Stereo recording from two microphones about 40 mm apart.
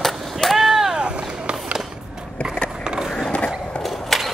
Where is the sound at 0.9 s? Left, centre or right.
Right.